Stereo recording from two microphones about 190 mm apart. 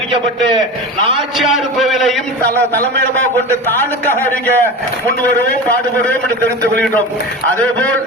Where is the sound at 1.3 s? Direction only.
Centre (ahead or behind).